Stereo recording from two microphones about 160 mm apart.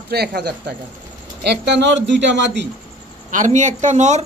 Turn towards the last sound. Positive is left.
turn(degrees=-45)  # may be behind; listen again after turning